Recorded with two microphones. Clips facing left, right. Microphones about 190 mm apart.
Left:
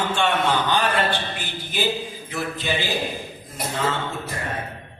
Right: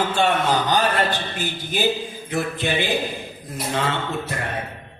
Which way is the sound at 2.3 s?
55° right (ahead or behind).